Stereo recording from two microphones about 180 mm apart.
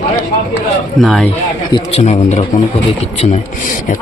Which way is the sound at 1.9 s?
35° left (ahead or behind).